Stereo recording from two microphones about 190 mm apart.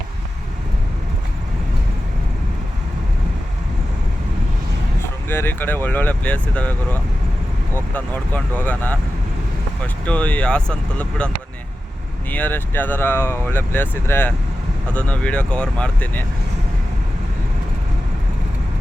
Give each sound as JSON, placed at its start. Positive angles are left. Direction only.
{"t": 5.3, "sound": "speech", "side_deg": 10}
{"t": 12.3, "sound": "speech", "side_deg": 10}